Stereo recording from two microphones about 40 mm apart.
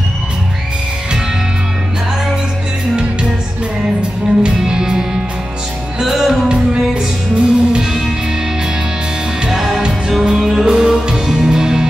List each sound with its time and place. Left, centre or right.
4.4 s music: centre
7.3 s music: right
9.5 s music: centre